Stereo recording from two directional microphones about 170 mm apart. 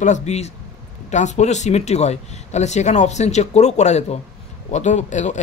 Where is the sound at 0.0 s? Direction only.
45° left (ahead or behind).